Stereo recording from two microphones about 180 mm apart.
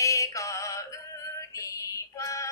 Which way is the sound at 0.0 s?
15° left (ahead or behind).